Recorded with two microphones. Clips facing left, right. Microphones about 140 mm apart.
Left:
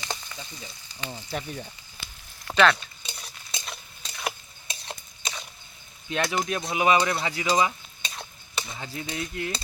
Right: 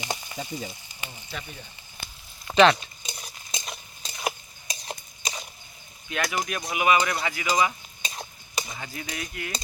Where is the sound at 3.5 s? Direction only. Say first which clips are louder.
Right 1 dB; 10° right (ahead or behind).